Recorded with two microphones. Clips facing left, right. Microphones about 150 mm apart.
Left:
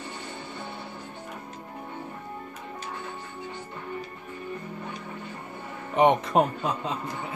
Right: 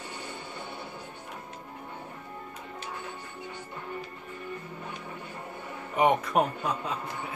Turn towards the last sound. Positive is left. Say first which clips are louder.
# left 3 dB
turn(degrees=20)  # may be behind; listen again after turning